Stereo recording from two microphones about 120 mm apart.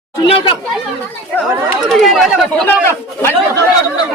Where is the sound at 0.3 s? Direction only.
50° left (ahead or behind).